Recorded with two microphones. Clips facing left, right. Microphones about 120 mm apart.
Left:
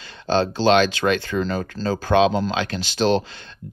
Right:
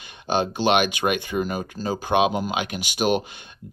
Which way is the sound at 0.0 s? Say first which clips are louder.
Left 3 dB; 15° right (ahead or behind).